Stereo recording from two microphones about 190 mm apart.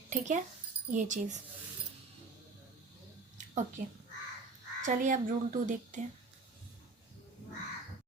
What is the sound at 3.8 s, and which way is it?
A woman's voice, 40° right (ahead or behind).